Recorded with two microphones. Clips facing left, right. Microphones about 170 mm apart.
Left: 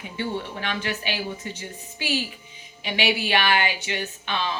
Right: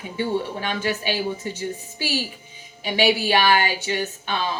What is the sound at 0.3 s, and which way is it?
Speech, 45° right (ahead or behind).